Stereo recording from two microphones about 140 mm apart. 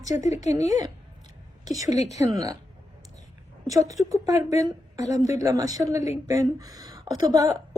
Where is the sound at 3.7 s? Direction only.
25° right (ahead or behind).